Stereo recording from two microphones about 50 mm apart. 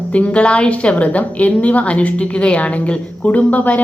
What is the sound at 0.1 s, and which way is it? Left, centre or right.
A woman's voice, left.